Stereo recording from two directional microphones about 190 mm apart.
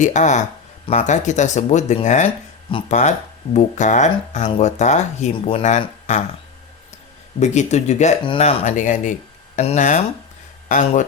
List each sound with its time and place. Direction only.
0.0 s speech: 40° left (ahead or behind)
7.3 s speech: 35° left (ahead or behind)